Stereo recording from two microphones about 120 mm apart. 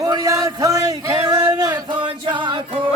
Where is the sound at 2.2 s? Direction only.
40° right (ahead or behind).